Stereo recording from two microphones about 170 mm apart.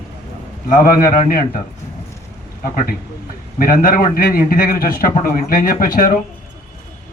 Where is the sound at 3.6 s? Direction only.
55° left (ahead or behind).